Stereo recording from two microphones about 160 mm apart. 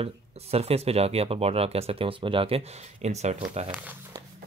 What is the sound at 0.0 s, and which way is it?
Speech, 40° right (ahead or behind).